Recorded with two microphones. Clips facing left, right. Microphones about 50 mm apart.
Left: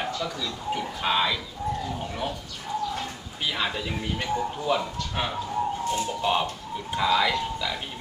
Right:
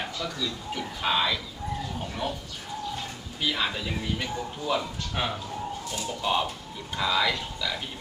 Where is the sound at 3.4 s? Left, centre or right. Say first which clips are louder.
Even; centre.